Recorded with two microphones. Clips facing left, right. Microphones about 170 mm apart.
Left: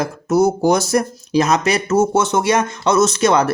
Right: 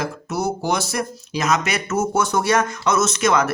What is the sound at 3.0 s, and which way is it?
Speech, 30° left (ahead or behind).